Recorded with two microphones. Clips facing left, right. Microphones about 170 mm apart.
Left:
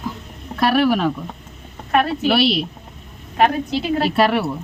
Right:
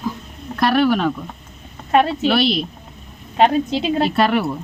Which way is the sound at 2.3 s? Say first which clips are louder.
Even; 5° left (ahead or behind).